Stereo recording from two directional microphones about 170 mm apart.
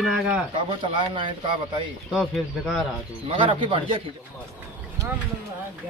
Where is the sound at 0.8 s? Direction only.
30° right (ahead or behind).